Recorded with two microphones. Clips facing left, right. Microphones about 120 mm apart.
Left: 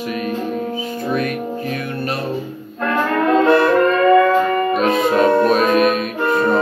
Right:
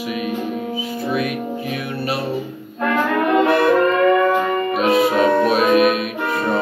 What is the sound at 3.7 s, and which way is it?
Music, 15° right (ahead or behind).